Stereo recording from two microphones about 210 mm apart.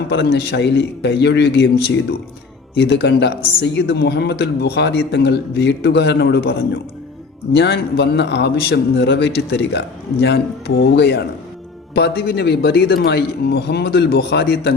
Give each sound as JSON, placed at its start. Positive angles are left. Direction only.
{"t": 0.1, "sound": "a man's voice", "side_deg": 55}